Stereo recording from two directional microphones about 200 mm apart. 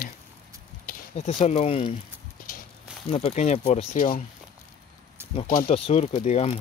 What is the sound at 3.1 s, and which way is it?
Speech, 30° left (ahead or behind).